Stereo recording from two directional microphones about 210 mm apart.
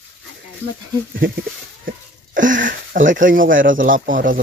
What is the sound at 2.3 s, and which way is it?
Speech, 40° right (ahead or behind).